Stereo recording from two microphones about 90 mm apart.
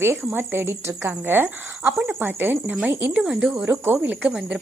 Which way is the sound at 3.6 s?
25° right (ahead or behind).